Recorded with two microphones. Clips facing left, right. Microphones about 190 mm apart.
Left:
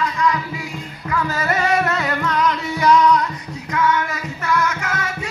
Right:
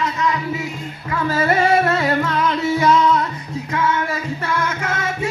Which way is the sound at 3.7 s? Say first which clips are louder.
Left 1 dB; 25° right (ahead or behind).